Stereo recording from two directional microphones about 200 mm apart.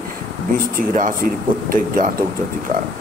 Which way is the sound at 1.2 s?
45° right (ahead or behind).